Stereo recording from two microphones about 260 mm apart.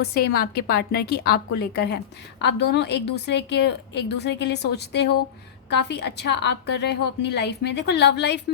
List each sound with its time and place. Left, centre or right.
0.0 s a woman's voice: left